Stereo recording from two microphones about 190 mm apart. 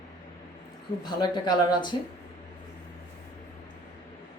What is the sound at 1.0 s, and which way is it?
Speech, 25° left (ahead or behind).